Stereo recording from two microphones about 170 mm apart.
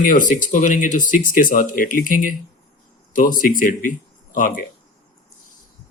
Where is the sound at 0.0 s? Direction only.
50° left (ahead or behind).